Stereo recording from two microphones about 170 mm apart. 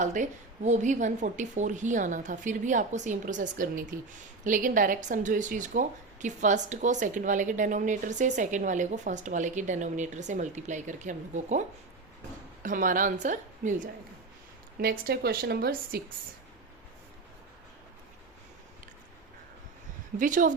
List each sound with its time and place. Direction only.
0.0 s a woman's voice: 45° right (ahead or behind)
12.6 s a woman's voice: 50° right (ahead or behind)
14.8 s a woman's voice: 60° right (ahead or behind)
20.1 s a woman's voice: 50° right (ahead or behind)